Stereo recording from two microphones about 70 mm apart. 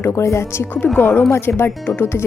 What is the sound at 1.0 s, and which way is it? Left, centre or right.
A woman's voice, left.